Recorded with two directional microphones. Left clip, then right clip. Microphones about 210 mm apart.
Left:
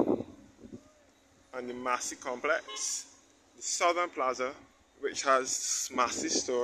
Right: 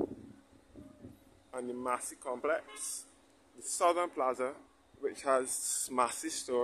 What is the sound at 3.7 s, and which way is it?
Speech, 15° right (ahead or behind).